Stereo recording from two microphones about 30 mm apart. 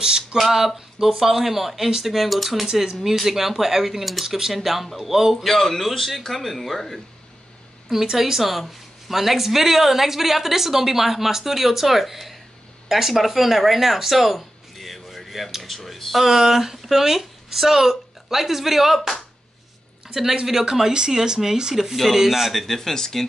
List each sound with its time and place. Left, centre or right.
0.0 s speech: right
0.4 s speech: centre
2.7 s speech: right
3.0 s speech: centre
5.4 s speech: centre
8.2 s speech: centre
16.3 s speech: centre
20.4 s speech: centre
21.9 s speech: centre
22.5 s speech: centre